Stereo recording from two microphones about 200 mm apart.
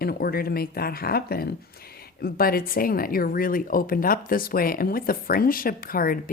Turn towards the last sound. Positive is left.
turn(degrees=45)  # may be behind; listen again after turning